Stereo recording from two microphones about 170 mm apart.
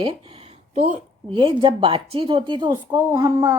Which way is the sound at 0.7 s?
45° right (ahead or behind).